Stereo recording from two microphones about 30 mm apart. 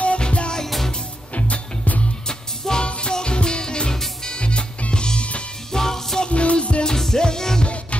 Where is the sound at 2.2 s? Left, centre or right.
Left.